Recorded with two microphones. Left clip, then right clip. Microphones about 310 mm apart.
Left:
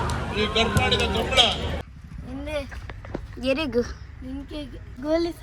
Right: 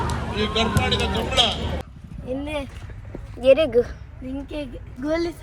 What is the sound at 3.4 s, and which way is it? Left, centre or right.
Speech, centre.